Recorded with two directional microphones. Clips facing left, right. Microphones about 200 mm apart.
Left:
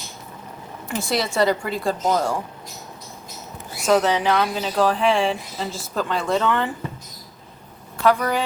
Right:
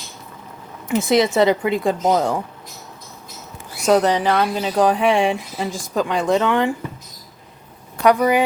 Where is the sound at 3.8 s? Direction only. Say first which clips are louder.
Right 3 dB; 15° right (ahead or behind).